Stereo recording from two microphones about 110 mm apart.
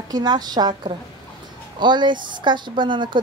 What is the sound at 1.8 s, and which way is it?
A woman's voice, 45° right (ahead or behind).